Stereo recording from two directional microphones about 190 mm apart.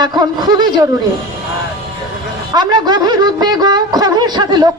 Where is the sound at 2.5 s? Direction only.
20° right (ahead or behind).